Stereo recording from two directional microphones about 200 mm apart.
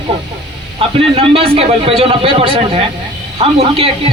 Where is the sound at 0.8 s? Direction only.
30° right (ahead or behind).